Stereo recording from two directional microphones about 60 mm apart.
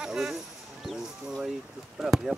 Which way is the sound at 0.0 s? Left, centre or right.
Centre.